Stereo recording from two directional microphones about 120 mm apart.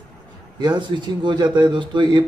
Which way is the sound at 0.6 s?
40° right (ahead or behind).